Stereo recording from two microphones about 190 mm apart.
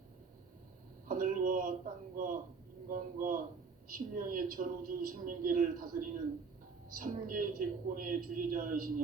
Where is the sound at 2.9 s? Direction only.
45° right (ahead or behind).